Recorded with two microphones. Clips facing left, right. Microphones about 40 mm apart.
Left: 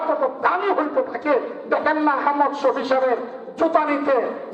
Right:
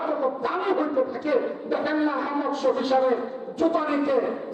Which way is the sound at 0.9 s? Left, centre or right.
Left.